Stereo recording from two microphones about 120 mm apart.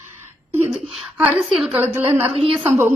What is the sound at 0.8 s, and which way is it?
Speech, 5° right (ahead or behind).